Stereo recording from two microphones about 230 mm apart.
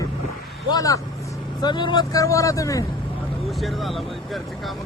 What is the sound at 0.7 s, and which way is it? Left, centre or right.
Speech, centre.